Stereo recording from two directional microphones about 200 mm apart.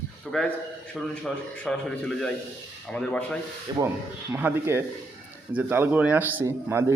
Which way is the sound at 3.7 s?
25° right (ahead or behind).